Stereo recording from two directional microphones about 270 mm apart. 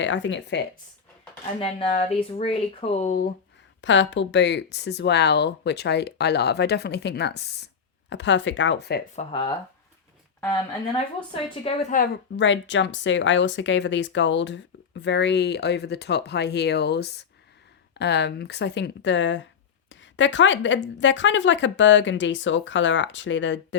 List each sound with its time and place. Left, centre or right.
0.0 s a woman's voice: left
1.5 s speech: left
3.8 s speech: left
9.1 s speech: centre
11.6 s speech: left
12.4 s a woman's voice: left